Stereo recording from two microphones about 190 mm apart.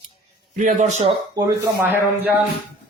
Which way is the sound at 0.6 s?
40° right (ahead or behind).